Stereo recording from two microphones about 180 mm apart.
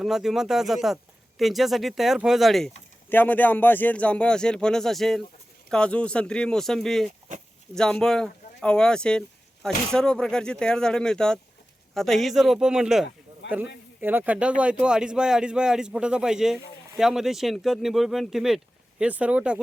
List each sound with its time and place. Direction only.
0.0 s speech: centre (ahead or behind)
13.4 s a sound: 80° left
14.0 s speech: 10° right (ahead or behind)